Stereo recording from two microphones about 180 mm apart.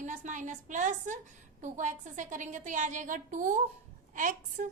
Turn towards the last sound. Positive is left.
turn(degrees=-45)  # may be behind; listen again after turning